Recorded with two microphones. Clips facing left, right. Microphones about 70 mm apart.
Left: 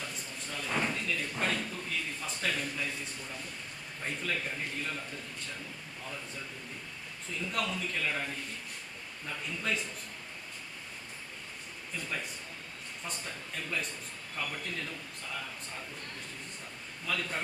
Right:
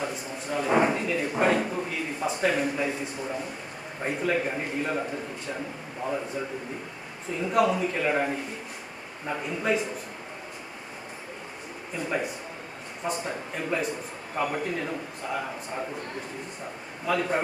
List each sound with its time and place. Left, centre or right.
0.0 s drawer open or close: centre
2.4 s a man's voice: right
7.3 s a man's voice: right
11.9 s a man's voice: centre
13.3 s a man's voice: right
17.1 s a man's voice: right